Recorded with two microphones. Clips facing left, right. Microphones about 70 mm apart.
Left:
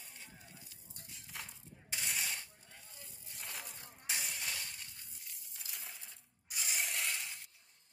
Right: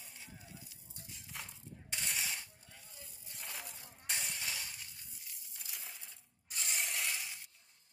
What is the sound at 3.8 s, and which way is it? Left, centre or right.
Vehicle, left.